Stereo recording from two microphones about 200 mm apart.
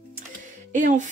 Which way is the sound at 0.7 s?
40° right (ahead or behind).